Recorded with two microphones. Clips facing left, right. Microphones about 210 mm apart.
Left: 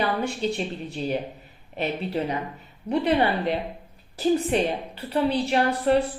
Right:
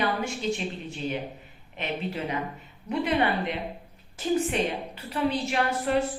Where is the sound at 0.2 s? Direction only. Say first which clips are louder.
Left 3 dB; 35° left (ahead or behind).